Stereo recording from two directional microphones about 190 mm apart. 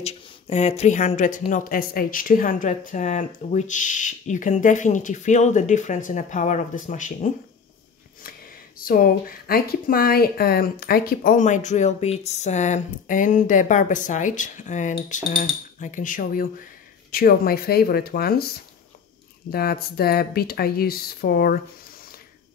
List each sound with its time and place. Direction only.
0.0 s speech: 35° left (ahead or behind)
8.7 s speech: 50° left (ahead or behind)
19.5 s speech: 55° left (ahead or behind)